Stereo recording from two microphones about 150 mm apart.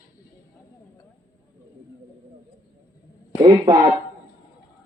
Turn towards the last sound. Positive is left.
turn(degrees=-30)  # may be behind; listen again after turning